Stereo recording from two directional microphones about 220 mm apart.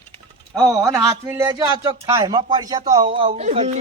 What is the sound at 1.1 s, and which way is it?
Speech, 15° right (ahead or behind).